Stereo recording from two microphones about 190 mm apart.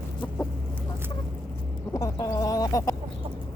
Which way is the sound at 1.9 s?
15° left (ahead or behind).